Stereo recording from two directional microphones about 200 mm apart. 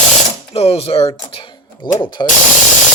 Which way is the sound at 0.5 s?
30° left (ahead or behind).